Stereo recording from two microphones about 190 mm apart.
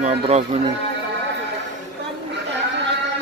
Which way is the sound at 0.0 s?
35° right (ahead or behind).